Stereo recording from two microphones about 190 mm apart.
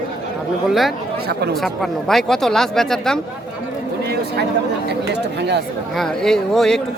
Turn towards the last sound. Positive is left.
turn(degrees=5)  # may be behind; listen again after turning